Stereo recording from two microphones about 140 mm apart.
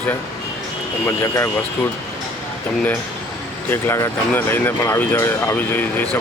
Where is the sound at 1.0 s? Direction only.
20° left (ahead or behind).